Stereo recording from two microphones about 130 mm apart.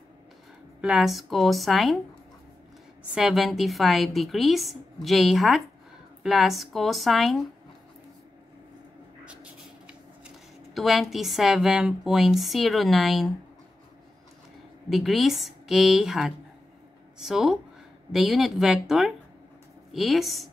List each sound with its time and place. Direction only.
0.7 s a woman's voice: 5° right (ahead or behind)
3.2 s a woman's voice: 5° right (ahead or behind)
9.2 s speech: 10° right (ahead or behind)
14.9 s a woman's voice: centre (ahead or behind)